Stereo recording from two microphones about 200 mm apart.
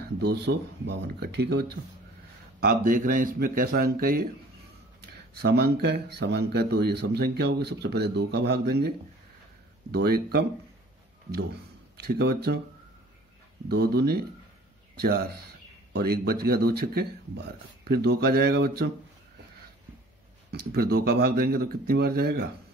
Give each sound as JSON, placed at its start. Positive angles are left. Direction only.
{"t": 0.2, "sound": "a man's voice", "side_deg": -55}
{"t": 5.4, "sound": "a man's voice", "side_deg": -55}
{"t": 12.1, "sound": "a man's voice", "side_deg": -55}
{"t": 13.7, "sound": "speech", "side_deg": -50}
{"t": 20.5, "sound": "speech", "side_deg": -50}